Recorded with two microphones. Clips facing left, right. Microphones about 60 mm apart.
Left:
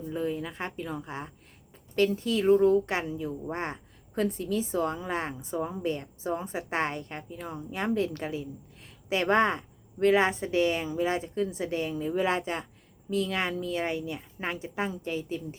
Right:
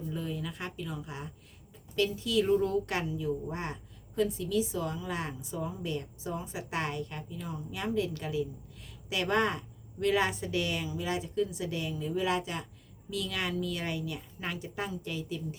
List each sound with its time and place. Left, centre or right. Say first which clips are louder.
0.1 s a woman's voice: left 7 dB; left